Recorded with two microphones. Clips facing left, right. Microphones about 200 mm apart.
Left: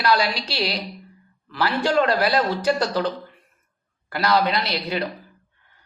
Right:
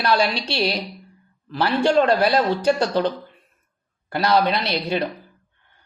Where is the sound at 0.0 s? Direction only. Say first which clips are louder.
Right 1 dB; 25° right (ahead or behind).